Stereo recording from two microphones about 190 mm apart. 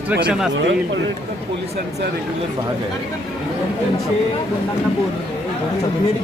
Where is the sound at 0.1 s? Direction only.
5° right (ahead or behind).